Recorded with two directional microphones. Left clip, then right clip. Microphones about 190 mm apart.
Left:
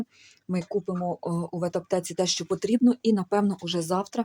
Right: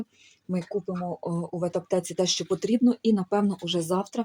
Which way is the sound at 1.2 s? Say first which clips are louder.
Even; centre (ahead or behind).